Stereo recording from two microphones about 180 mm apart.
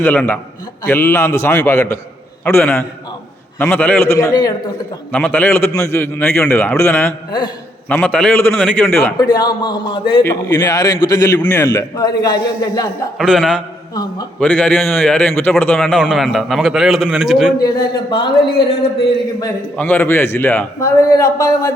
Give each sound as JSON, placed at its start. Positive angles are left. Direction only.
{"t": 0.0, "sound": "a man's voice", "side_deg": 10}
{"t": 5.1, "sound": "a man's voice", "side_deg": 10}
{"t": 9.1, "sound": "a man's voice", "side_deg": 20}
{"t": 13.1, "sound": "a man's voice", "side_deg": 0}
{"t": 13.9, "sound": "a man's voice", "side_deg": 20}
{"t": 14.3, "sound": "a man's voice", "side_deg": 5}
{"t": 18.1, "sound": "a man's voice", "side_deg": 25}
{"t": 19.7, "sound": "a man's voice", "side_deg": 10}